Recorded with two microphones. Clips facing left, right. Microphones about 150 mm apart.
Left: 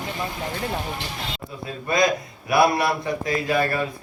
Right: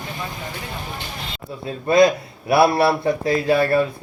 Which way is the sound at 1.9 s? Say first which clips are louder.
Right 6 dB; 30° right (ahead or behind).